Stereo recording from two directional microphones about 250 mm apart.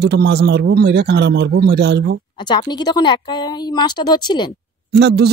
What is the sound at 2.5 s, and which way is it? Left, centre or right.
Speech, centre.